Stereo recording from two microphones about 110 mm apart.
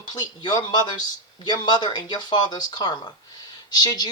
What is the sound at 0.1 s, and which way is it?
Speech, 40° left (ahead or behind).